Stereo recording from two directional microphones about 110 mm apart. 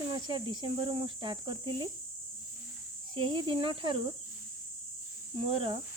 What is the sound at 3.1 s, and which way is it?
Speech, 45° right (ahead or behind).